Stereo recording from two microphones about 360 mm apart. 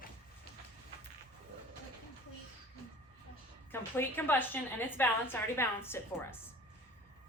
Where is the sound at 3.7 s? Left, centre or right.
Centre.